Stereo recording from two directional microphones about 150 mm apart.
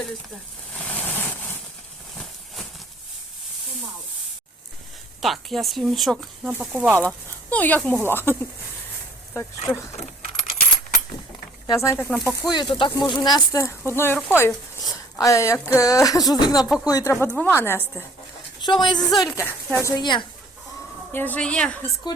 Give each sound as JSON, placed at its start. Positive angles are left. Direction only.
{"t": 0.8, "sound": "vehicle", "side_deg": 10}
{"t": 5.2, "sound": "speech", "side_deg": 0}
{"t": 7.5, "sound": "speech", "side_deg": 10}
{"t": 9.7, "sound": "speech", "side_deg": 15}
{"t": 11.8, "sound": "speech", "side_deg": 15}
{"t": 12.5, "sound": "speech", "side_deg": 30}
{"t": 18.6, "sound": "speech", "side_deg": 30}
{"t": 19.3, "sound": "speech", "side_deg": 15}
{"t": 20.0, "sound": "speech", "side_deg": 30}
{"t": 21.1, "sound": "speech", "side_deg": 10}
{"t": 22.0, "sound": "speech", "side_deg": 30}